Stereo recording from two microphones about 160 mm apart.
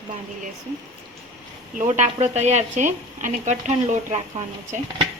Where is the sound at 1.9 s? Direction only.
45° right (ahead or behind).